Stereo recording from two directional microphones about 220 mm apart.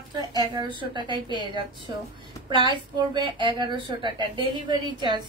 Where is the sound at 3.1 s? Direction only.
20° right (ahead or behind).